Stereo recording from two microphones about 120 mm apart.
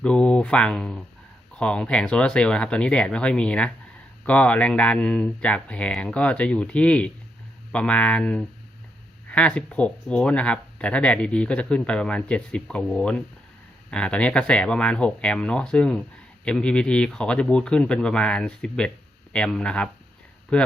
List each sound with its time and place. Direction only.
0.0 s speech: 10° left (ahead or behind)